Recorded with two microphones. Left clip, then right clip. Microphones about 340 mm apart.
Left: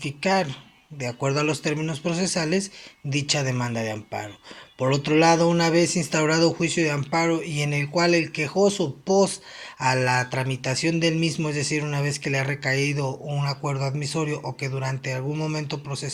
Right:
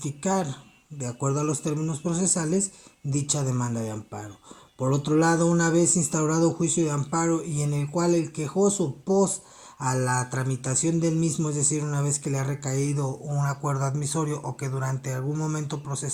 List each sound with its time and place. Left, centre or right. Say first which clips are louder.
0.0 s speech: left 4 dB; centre
5.2 s speech: left 5 dB; centre